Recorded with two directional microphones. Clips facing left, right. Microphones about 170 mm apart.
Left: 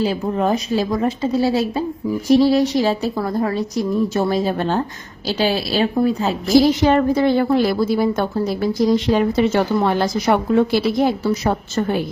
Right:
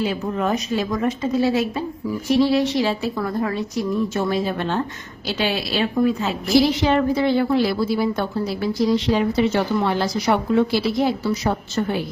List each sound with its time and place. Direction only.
0.0 s a woman's voice: 35° left (ahead or behind); by 12.0 s 50° left (ahead or behind)